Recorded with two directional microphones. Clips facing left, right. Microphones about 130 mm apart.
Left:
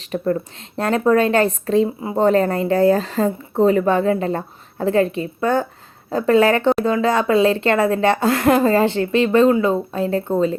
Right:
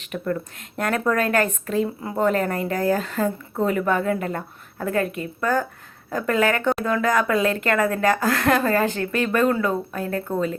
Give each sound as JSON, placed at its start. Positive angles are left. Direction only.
{"t": 0.0, "sound": "speech", "side_deg": 30}
{"t": 2.0, "sound": "speech", "side_deg": 20}
{"t": 2.2, "sound": "speech", "side_deg": 30}